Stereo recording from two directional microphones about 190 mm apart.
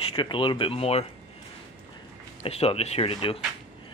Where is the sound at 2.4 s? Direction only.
30° left (ahead or behind).